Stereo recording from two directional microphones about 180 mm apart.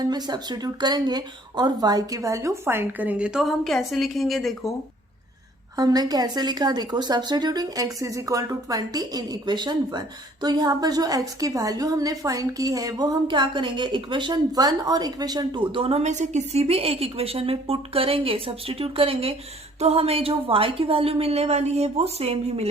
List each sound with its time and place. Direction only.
0.0 s speech: 20° right (ahead or behind); by 4.5 s centre (ahead or behind)
5.7 s a woman's voice: 20° right (ahead or behind)